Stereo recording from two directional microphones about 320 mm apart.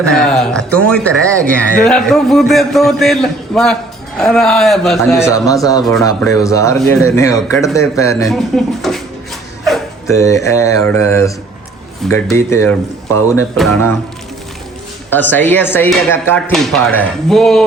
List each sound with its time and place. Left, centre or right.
0.0 s a man's voice: centre
9.6 s mantra: centre
12.0 s a man's voice: centre
15.1 s speech: centre